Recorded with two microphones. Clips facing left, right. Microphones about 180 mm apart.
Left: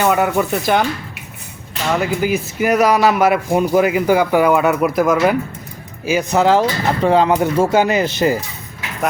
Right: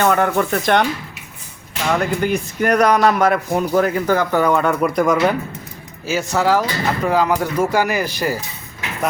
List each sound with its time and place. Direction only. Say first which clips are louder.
0.0 s speech: left 1 dB; 10° left (ahead or behind)
6.1 s speech: left 3 dB; 15° left (ahead or behind)